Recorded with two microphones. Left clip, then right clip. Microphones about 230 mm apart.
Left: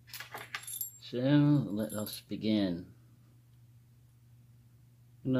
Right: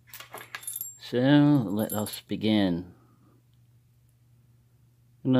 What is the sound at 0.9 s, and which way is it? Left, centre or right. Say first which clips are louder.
Speech: right 7 dB; right.